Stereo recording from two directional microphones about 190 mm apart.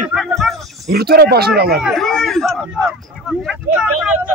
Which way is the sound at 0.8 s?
55° right (ahead or behind).